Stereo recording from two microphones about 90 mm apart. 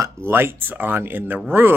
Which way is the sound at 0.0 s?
25° right (ahead or behind).